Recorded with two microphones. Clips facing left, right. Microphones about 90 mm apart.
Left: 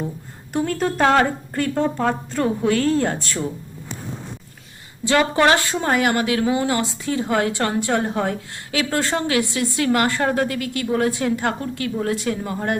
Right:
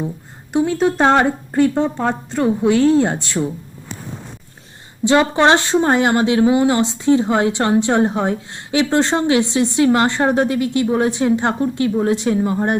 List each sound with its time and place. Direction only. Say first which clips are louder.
0.5 s a woman's voice: right 5 dB; 15° right (ahead or behind)
5.0 s speech: right 3 dB; 20° right (ahead or behind)